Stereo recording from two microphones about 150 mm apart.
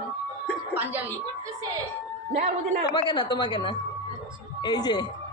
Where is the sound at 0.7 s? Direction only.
15° right (ahead or behind).